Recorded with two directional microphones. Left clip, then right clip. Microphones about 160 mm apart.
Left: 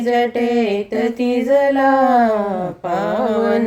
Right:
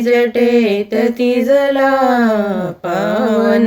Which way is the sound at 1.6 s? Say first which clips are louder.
Right 2 dB; 25° right (ahead or behind).